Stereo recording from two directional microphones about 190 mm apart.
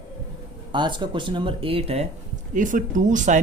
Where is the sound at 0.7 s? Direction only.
25° right (ahead or behind).